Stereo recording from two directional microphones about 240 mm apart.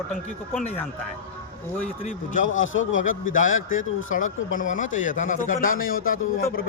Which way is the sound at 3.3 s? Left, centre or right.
Left.